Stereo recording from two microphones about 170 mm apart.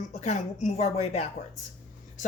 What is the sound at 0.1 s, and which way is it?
Speech, 40° left (ahead or behind).